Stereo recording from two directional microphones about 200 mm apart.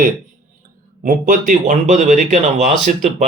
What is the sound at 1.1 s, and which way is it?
Speech, 40° right (ahead or behind).